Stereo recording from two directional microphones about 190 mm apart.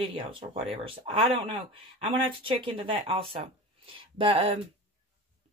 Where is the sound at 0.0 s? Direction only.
30° right (ahead or behind).